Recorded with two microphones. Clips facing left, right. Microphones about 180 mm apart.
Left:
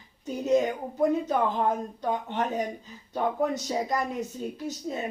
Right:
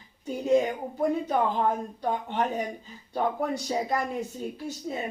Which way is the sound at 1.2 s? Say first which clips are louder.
Even; 40° left (ahead or behind).